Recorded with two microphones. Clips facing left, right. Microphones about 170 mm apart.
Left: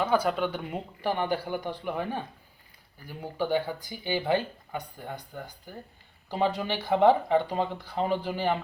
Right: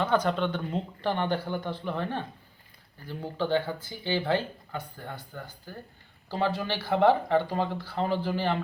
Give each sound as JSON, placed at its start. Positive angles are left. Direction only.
{"t": 0.0, "sound": "speech", "side_deg": 10}